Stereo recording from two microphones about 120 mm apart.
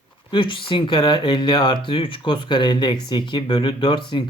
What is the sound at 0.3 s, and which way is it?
Speech, 40° left (ahead or behind).